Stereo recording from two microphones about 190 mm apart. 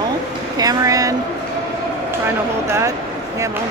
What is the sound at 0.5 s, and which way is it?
Speech, 20° right (ahead or behind).